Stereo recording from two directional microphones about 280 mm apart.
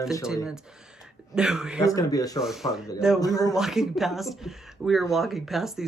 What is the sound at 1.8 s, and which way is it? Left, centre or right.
Speech, centre.